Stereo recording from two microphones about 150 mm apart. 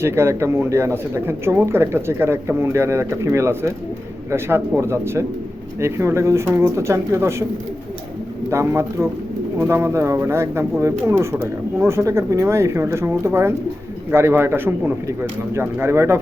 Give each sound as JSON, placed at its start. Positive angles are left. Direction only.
{"t": 0.0, "sound": "speech", "side_deg": -20}
{"t": 8.4, "sound": "speech", "side_deg": -15}